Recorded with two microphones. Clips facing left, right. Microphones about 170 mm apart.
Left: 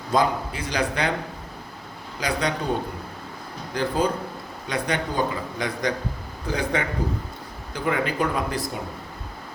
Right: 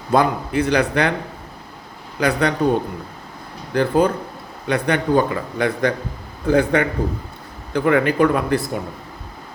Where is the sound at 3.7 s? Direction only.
60° right (ahead or behind).